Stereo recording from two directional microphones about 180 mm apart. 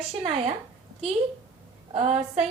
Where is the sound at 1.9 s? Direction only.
35° right (ahead or behind).